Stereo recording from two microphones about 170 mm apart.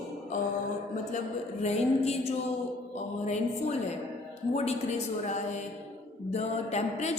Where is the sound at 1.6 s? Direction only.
40° left (ahead or behind).